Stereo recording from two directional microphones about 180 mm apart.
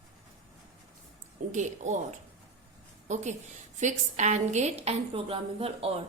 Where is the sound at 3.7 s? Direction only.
40° right (ahead or behind).